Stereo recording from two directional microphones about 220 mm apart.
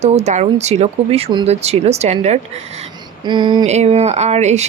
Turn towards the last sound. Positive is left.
turn(degrees=-30)  # may be behind; listen again after turning